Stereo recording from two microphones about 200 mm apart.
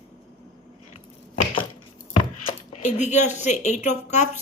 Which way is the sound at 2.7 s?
35° left (ahead or behind).